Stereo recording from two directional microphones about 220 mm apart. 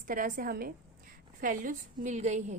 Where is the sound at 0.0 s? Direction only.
35° right (ahead or behind).